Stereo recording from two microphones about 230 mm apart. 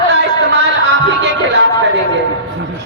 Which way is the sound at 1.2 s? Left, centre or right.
Right.